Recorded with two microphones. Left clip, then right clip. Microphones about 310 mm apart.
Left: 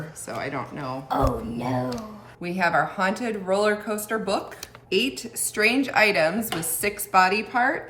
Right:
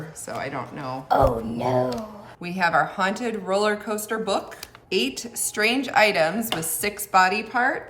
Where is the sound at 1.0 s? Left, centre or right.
Right.